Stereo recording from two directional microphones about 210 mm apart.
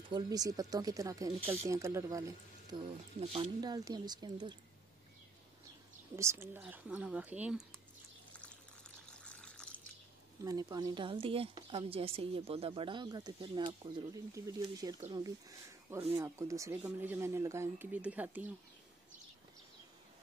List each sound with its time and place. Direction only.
0.1 s a woman's voice: 20° right (ahead or behind)
6.1 s speech: 15° right (ahead or behind)
8.3 s water: 5° left (ahead or behind)
10.4 s a woman's voice: 15° right (ahead or behind)